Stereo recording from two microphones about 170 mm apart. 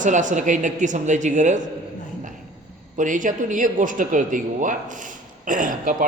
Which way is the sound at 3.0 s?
50° right (ahead or behind).